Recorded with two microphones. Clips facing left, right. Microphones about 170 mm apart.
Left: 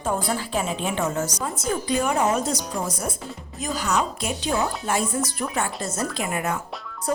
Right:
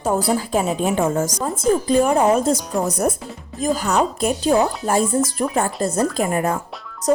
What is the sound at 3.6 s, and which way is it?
A woman's voice, 45° right (ahead or behind).